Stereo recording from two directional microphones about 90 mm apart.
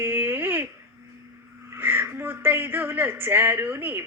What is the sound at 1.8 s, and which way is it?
Speech, 25° right (ahead or behind).